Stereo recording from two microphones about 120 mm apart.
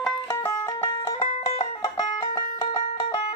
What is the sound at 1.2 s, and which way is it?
Music, 45° left (ahead or behind).